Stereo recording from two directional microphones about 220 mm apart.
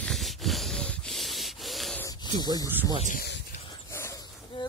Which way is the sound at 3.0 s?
35° left (ahead or behind).